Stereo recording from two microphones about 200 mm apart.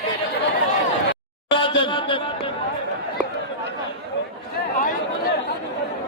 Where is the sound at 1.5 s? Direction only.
25° left (ahead or behind).